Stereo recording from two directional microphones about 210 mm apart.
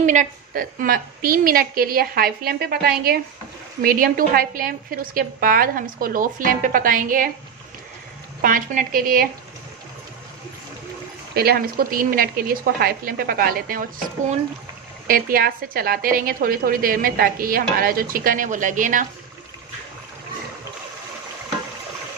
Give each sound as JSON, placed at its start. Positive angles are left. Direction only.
{"t": 0.0, "sound": "a woman's voice", "side_deg": -35}
{"t": 8.4, "sound": "a woman's voice", "side_deg": -40}
{"t": 11.3, "sound": "a woman's voice", "side_deg": -45}
{"t": 15.0, "sound": "a woman's voice", "side_deg": -45}